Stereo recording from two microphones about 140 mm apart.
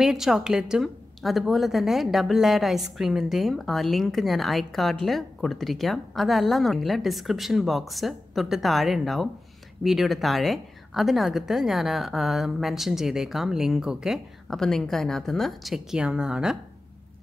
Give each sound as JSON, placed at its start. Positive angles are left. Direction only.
{"t": 0.0, "sound": "a woman's voice", "side_deg": -5}